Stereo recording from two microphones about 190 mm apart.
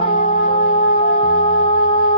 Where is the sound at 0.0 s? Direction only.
30° left (ahead or behind).